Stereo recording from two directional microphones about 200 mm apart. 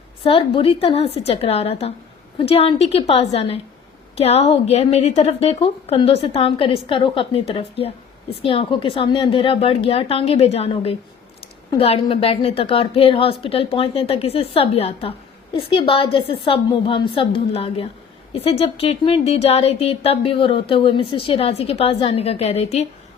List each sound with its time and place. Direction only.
0.3 s speech: 30° left (ahead or behind)